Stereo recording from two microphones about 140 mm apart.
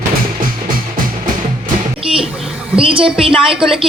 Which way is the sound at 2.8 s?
40° right (ahead or behind).